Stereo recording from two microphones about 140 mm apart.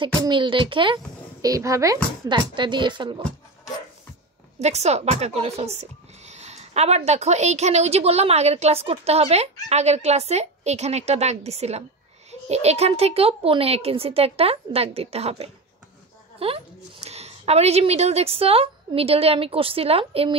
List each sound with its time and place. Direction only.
0.0 s a child's voice: 35° right (ahead or behind)
1.4 s a woman's voice: 25° right (ahead or behind)
2.2 s a child's voice: 35° right (ahead or behind)
4.6 s speech: 50° right (ahead or behind)